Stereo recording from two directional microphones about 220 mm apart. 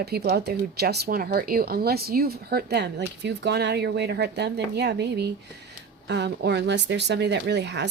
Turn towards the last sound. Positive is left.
turn(degrees=-50)  # may be behind; listen again after turning